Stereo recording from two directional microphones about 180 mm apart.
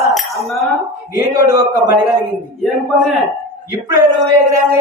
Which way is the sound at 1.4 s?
20° right (ahead or behind).